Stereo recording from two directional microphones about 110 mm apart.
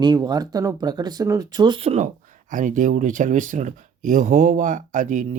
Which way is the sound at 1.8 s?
70° right (ahead or behind).